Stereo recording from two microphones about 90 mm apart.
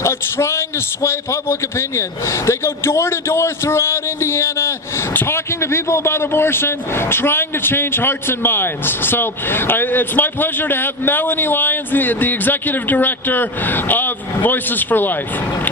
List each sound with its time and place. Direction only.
0.0 s a man's voice: 30° left (ahead or behind)